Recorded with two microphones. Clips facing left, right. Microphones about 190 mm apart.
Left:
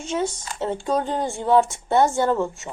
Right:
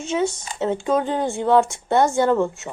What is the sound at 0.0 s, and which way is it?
Speech, 20° right (ahead or behind).